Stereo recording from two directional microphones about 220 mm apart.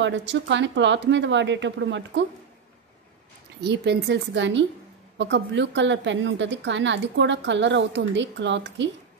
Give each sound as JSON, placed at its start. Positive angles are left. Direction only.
{"t": 0.0, "sound": "a woman's voice", "side_deg": -55}
{"t": 3.6, "sound": "a woman's voice", "side_deg": -50}